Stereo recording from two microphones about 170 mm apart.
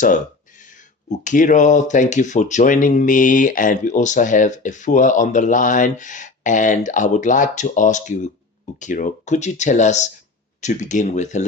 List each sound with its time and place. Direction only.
1.1 s speech: 50° left (ahead or behind)